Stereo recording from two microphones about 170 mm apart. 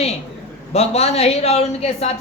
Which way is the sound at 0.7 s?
35° left (ahead or behind).